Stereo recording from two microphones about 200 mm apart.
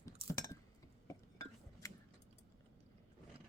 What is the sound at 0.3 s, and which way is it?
Chink, 15° left (ahead or behind).